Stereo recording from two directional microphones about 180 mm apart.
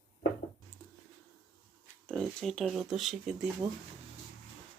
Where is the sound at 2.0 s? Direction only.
5° left (ahead or behind).